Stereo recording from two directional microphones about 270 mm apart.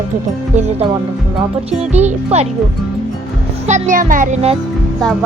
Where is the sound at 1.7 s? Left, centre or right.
Right.